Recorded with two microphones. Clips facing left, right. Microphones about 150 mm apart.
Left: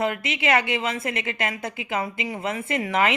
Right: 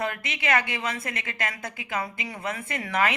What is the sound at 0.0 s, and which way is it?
A woman's voice, 20° left (ahead or behind).